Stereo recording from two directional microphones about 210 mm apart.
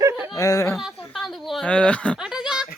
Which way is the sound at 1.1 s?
Centre (ahead or behind).